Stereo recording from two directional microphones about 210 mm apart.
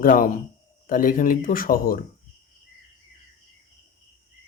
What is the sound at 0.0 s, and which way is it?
Speech, 40° left (ahead or behind).